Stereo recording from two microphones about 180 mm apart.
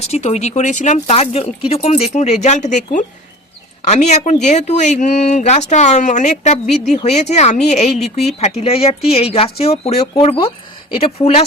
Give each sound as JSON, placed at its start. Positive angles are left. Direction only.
{"t": 0.0, "sound": "speech", "side_deg": 40}